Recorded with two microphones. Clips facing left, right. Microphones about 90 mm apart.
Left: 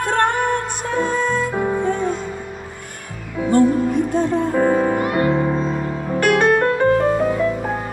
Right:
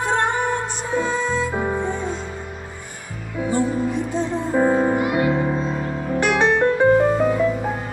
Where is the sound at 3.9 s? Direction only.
50° left (ahead or behind).